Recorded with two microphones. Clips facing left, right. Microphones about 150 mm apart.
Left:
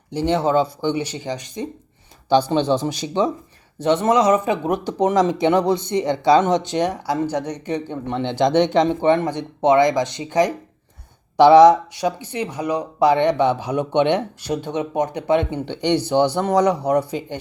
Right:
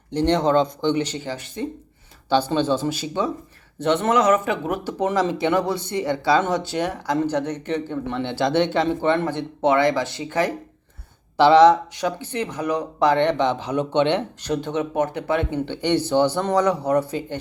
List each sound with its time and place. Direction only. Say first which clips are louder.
0.1 s speech: even; 10° left (ahead or behind)